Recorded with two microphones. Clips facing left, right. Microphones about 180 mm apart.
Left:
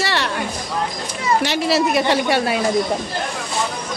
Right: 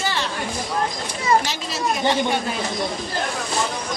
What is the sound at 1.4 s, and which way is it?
Speech, 70° left (ahead or behind).